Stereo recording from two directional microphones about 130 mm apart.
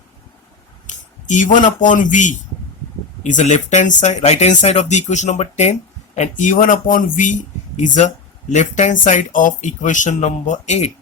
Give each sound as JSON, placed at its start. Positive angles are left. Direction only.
{"t": 1.3, "sound": "speech", "side_deg": 75}